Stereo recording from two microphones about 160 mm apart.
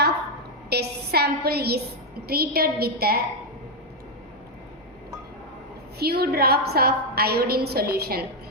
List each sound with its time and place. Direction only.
0.7 s a sound: 90° right
2.2 s a woman's voice: 75° right (ahead or behind)
6.0 s a woman's voice: 80° right